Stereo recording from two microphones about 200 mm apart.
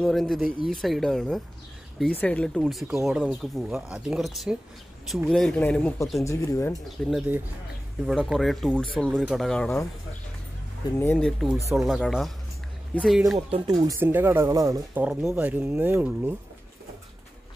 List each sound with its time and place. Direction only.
0.0 s speech: centre (ahead or behind)
6.8 s speech: centre (ahead or behind)
11.0 s speech: 5° left (ahead or behind)
13.5 s speech: 20° right (ahead or behind)
15.0 s speech: 5° right (ahead or behind)